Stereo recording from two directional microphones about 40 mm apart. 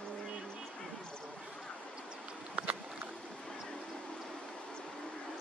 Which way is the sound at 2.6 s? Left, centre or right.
Right.